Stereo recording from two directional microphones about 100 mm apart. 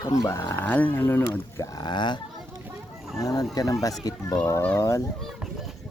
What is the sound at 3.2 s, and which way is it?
Speech, 35° left (ahead or behind).